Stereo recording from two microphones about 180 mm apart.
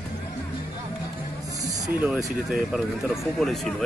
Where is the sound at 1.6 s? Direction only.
20° right (ahead or behind).